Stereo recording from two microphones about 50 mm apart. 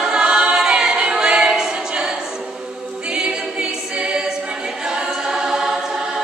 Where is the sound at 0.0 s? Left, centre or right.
Centre.